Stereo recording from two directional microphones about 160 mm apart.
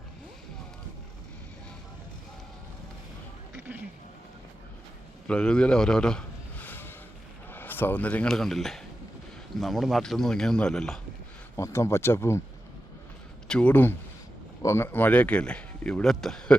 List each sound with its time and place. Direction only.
5.3 s a sound: 5° left (ahead or behind)
7.5 s a man's voice: 10° left (ahead or behind)
11.5 s speech: 20° left (ahead or behind)
13.5 s speech: 10° left (ahead or behind)